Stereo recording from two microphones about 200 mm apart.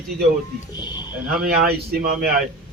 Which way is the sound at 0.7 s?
20° left (ahead or behind).